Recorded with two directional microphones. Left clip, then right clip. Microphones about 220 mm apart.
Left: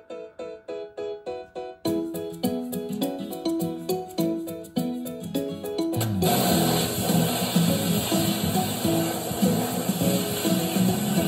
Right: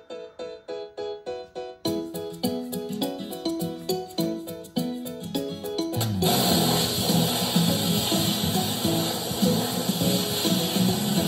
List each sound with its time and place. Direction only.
1.9 s music: 5° right (ahead or behind)